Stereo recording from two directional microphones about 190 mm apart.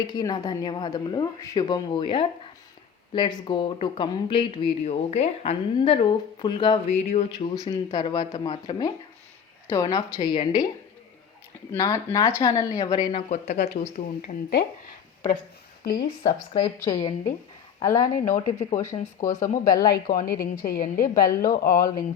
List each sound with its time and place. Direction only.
0.1 s speech: 20° left (ahead or behind)
6.9 s speech: 35° left (ahead or behind)
7.3 s speech: 20° left (ahead or behind)
11.7 s speech: 15° left (ahead or behind); by 14.3 s 40° left (ahead or behind)
15.8 s a woman's voice: 55° left (ahead or behind)
16.6 s speech: 20° left (ahead or behind)
19.9 s a woman's voice: 50° left (ahead or behind)